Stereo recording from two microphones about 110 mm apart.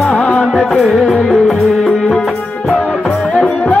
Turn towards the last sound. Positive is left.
turn(degrees=10)  # may be behind; listen again after turning